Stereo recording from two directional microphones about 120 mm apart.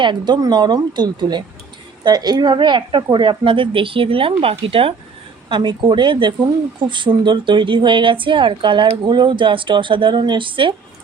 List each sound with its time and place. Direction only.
0.0 s speech: 40° right (ahead or behind)